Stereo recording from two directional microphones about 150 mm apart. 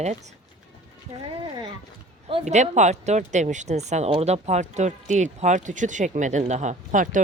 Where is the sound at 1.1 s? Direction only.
35° right (ahead or behind).